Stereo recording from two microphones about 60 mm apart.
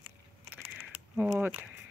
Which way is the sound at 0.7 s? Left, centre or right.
Centre.